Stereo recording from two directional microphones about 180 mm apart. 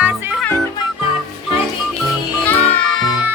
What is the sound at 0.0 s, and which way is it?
Music, 5° right (ahead or behind).